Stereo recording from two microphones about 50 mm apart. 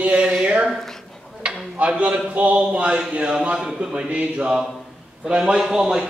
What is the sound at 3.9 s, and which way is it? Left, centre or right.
Speech, right.